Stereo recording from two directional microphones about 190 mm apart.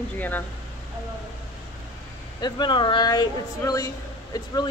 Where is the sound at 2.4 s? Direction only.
20° left (ahead or behind).